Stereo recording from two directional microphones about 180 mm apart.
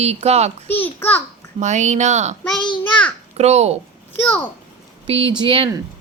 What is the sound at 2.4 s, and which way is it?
Speech, 5° left (ahead or behind).